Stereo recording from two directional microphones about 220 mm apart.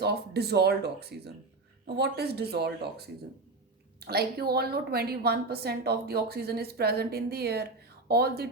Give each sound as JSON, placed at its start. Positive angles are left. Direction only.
{"t": 0.0, "sound": "a woman's voice", "side_deg": -50}
{"t": 4.0, "sound": "a woman's voice", "side_deg": -45}